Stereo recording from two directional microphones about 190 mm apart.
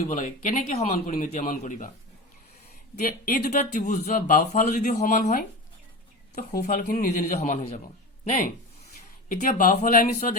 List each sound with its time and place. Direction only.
0.1 s speech: 45° left (ahead or behind)
2.9 s speech: 50° left (ahead or behind)
9.3 s speech: 45° left (ahead or behind)